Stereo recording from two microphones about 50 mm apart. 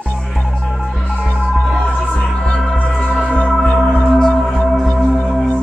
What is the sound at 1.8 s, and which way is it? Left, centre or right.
Music, left.